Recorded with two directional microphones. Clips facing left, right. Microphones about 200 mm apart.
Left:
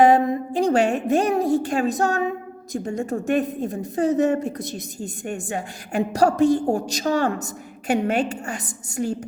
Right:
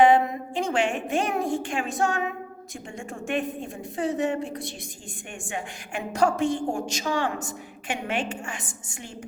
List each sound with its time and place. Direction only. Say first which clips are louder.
0.0 s a woman's voice: left 3 dB; 40° left (ahead or behind)